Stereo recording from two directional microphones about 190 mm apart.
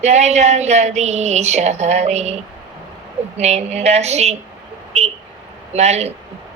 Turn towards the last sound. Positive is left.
turn(degrees=-35)  # may be behind; listen again after turning